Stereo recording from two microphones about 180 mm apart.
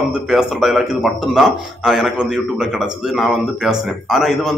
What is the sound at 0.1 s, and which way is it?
Speech, centre (ahead or behind).